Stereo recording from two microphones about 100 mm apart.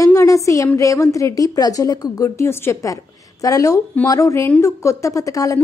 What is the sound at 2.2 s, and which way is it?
A woman's voice, 30° left (ahead or behind).